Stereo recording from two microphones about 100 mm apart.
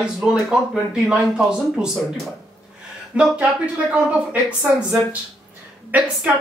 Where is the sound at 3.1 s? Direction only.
10° right (ahead or behind).